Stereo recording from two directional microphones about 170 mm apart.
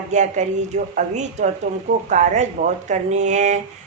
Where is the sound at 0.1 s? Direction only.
45° right (ahead or behind).